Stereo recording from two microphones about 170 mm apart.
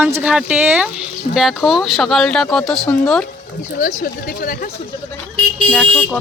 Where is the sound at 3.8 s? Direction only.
50° left (ahead or behind).